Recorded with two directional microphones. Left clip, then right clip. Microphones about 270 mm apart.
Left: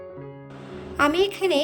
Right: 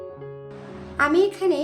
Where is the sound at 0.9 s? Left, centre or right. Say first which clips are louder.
Right 1 dB; left.